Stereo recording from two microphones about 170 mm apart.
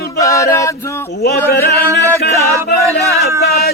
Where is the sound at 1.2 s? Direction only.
70° left (ahead or behind).